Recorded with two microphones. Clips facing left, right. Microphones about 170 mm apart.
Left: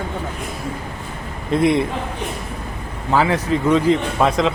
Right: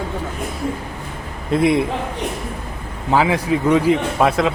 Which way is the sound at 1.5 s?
Centre (ahead or behind).